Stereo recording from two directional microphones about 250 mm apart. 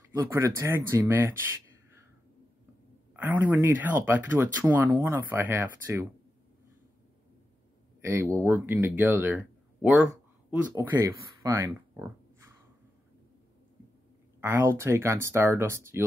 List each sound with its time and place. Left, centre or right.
0.1 s speech: centre
3.2 s speech: centre
8.0 s speech: centre
14.4 s speech: centre